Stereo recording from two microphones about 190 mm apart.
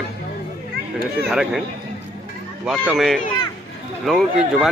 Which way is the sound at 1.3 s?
5° right (ahead or behind).